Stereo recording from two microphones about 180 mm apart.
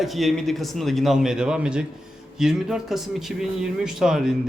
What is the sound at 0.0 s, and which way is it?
A man's voice, centre (ahead or behind).